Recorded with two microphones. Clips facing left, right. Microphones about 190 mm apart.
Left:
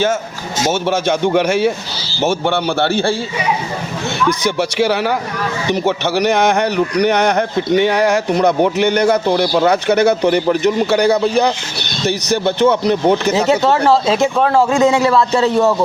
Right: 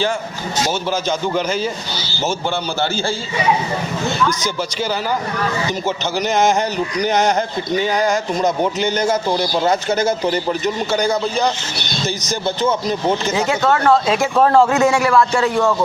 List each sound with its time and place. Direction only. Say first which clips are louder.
0.7 s a man's voice: left 7 dB; 60° left (ahead or behind)
4.3 s a man's voice: left 5 dB; 65° left (ahead or behind)
13.3 s a man's voice: left 4 dB; 25° left (ahead or behind)